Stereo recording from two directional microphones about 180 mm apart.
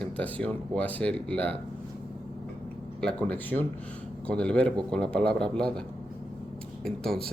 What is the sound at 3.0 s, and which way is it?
Speech, 10° left (ahead or behind).